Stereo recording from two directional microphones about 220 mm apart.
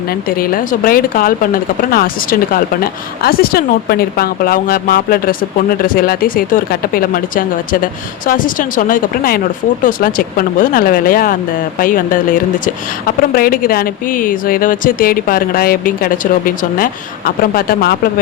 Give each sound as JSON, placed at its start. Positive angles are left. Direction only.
{"t": 0.1, "sound": "speech", "side_deg": 40}